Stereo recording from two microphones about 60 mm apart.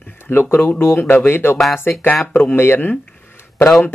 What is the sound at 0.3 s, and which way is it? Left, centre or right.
A man's voice, left.